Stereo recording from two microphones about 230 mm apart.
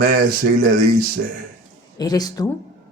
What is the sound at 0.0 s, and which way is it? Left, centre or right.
A man's voice, right.